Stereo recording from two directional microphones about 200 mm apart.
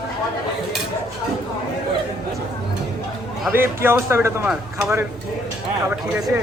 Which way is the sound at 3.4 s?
10° right (ahead or behind).